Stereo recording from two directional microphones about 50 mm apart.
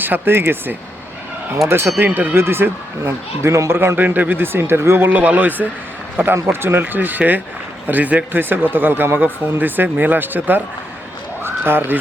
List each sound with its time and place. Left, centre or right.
0.0 s speech: right
3.7 s speech: right
3.9 s speech: right
5.0 s speech: right
6.3 s speech: right
11.4 s a sound: right